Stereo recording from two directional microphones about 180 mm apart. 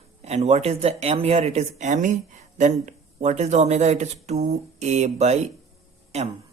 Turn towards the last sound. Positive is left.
turn(degrees=-35)  # may be behind; listen again after turning